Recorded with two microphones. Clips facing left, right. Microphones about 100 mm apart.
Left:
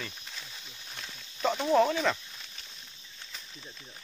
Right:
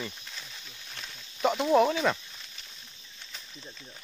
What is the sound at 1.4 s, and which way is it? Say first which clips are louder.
Speech: right 2 dB; 15° right (ahead or behind).